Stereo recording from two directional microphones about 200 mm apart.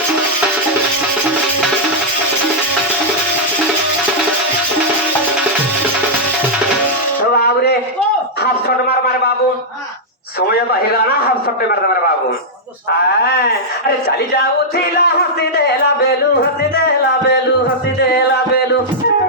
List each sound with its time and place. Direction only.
7.3 s a sound: 55° left (ahead or behind)
10.9 s a man's voice: 50° left (ahead or behind)
13.2 s a man's voice: 55° left (ahead or behind)
14.9 s speech: 55° left (ahead or behind)
18.0 s music: 55° left (ahead or behind)